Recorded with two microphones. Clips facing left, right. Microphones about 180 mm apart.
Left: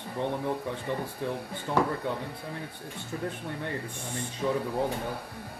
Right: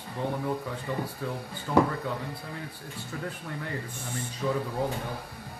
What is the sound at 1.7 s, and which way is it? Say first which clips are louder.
Speech: right 4 dB; 30° left (ahead or behind).